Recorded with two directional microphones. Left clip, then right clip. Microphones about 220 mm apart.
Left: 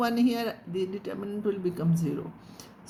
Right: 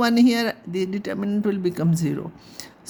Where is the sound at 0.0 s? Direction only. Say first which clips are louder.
Right 7 dB; 45° right (ahead or behind).